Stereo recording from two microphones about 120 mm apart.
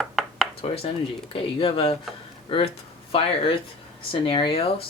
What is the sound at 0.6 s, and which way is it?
Speech, 55° left (ahead or behind).